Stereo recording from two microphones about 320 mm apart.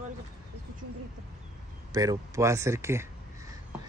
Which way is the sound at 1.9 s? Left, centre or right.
Centre.